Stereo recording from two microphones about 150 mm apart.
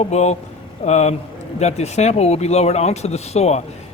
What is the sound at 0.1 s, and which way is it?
Speech, 50° left (ahead or behind).